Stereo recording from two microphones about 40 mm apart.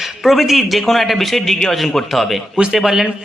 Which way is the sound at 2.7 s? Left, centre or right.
Centre.